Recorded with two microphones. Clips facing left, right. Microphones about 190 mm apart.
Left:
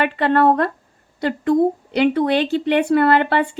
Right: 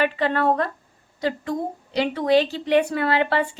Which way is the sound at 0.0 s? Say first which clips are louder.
Left 5 dB; 60° left (ahead or behind).